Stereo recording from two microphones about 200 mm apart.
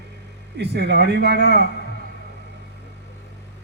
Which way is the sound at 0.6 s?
55° right (ahead or behind).